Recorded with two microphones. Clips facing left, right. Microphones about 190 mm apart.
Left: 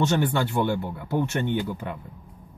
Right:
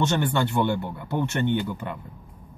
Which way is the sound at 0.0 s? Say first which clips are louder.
Left 1 dB; 5° left (ahead or behind).